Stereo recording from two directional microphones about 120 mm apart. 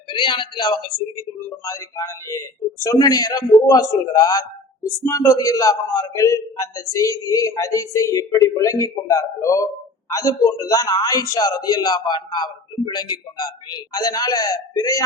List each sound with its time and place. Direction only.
0.1 s a man's voice: 40° left (ahead or behind)
1.6 s a man's voice: 25° left (ahead or behind)